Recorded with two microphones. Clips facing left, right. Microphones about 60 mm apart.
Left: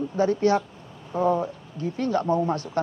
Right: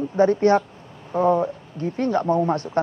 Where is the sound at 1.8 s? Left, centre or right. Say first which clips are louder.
Right 3 dB; right.